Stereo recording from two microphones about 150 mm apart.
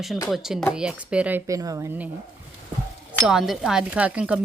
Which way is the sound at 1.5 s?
20° right (ahead or behind).